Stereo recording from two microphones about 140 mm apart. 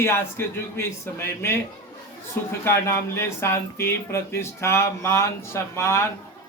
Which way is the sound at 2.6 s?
20° left (ahead or behind).